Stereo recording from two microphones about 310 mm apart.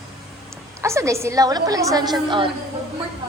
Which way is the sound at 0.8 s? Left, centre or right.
Centre.